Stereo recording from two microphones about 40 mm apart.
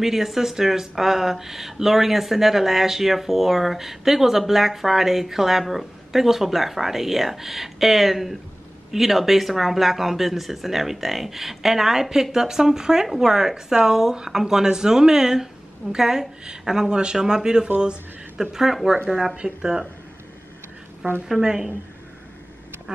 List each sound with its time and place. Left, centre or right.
0.0 s speech: centre
17.6 s speech: right
18.4 s speech: centre
19.3 s speech: centre
21.4 s speech: centre